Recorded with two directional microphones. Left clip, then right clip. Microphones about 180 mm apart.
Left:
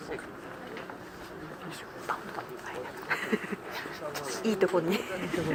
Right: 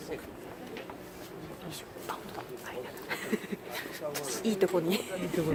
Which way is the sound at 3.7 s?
60° right (ahead or behind).